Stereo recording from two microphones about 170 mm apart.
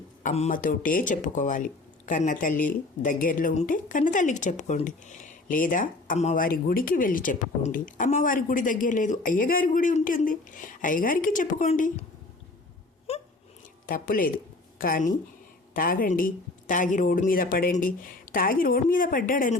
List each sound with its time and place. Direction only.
0.2 s speech: 45° left (ahead or behind)
13.1 s a sound: 35° left (ahead or behind)
13.8 s speech: 55° left (ahead or behind)